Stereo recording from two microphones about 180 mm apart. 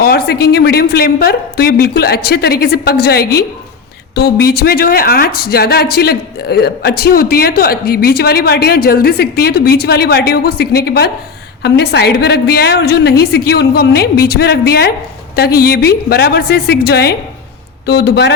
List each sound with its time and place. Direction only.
0.0 s speech: 60° left (ahead or behind)